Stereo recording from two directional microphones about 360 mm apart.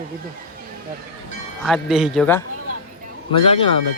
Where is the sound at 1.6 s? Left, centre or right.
Centre.